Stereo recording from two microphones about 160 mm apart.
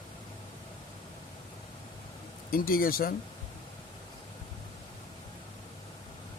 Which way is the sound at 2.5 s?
65° left (ahead or behind).